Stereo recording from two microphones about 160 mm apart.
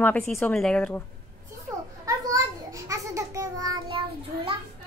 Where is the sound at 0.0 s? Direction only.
10° left (ahead or behind).